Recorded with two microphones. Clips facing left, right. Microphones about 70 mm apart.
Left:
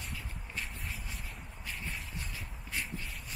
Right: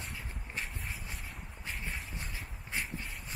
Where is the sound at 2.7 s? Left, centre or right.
Right.